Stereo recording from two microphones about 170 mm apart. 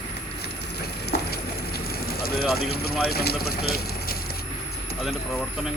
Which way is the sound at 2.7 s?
65° left (ahead or behind).